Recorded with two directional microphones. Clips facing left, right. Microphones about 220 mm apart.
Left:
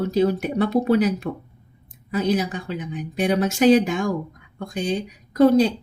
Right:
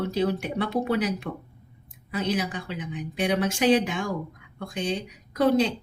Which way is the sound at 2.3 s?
45° left (ahead or behind).